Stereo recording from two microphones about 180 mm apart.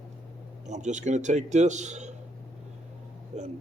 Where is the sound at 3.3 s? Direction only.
40° right (ahead or behind).